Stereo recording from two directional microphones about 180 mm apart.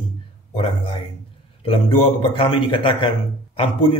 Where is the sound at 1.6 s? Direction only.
30° left (ahead or behind).